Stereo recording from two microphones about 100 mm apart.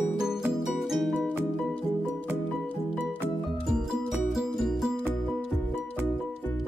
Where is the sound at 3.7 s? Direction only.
Centre (ahead or behind).